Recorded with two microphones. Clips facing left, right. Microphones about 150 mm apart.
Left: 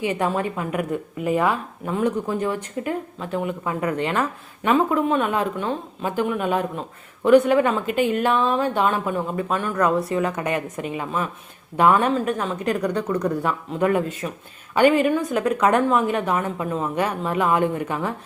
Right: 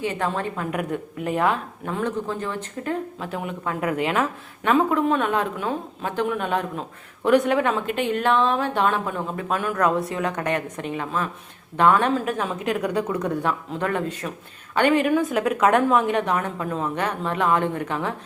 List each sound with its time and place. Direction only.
0.0 s a woman's voice: 10° left (ahead or behind)
3.2 s a woman's voice: centre (ahead or behind)